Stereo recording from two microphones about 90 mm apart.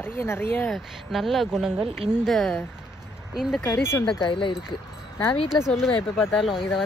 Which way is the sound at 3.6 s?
30° left (ahead or behind).